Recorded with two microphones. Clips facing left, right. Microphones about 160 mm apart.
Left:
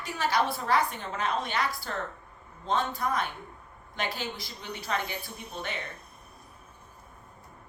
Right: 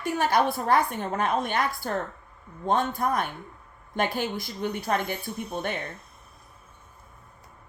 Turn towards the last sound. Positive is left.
turn(degrees=-50)  # may be behind; listen again after turning